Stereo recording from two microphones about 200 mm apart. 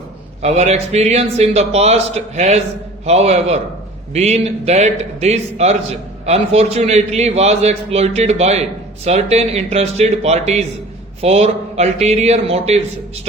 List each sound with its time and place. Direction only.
0.4 s a man's voice: 35° right (ahead or behind)